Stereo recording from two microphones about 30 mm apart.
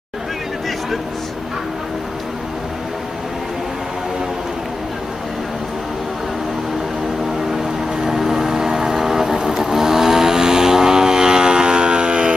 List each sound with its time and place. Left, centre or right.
7.5 s vehicle: centre; by 12.4 s right